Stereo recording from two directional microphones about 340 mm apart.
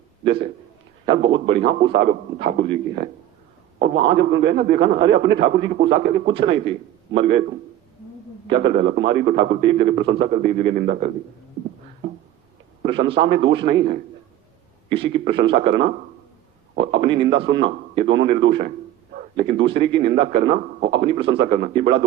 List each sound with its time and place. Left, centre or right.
0.3 s a man's voice: centre
8.4 s a man's voice: centre
12.9 s a man's voice: centre
16.7 s a sound: right
17.0 s a man's voice: centre